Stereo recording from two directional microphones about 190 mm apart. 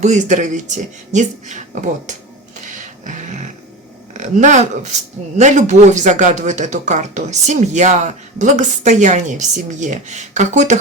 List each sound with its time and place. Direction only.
0.0 s speech: 40° right (ahead or behind)
2.6 s a sound: 40° right (ahead or behind)
4.1 s speech: 40° right (ahead or behind)